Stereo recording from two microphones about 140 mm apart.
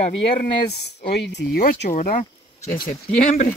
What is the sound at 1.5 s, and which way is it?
Speech, 90° left.